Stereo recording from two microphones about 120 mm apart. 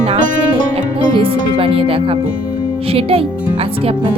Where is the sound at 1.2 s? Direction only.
50° right (ahead or behind).